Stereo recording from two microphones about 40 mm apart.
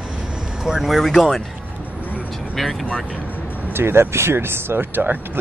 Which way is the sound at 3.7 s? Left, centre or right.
Right.